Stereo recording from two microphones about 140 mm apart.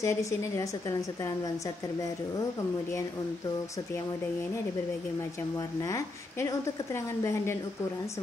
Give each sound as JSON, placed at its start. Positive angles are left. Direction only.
{"t": 0.0, "sound": "a woman's voice", "side_deg": 20}
{"t": 5.6, "sound": "a woman's voice", "side_deg": 25}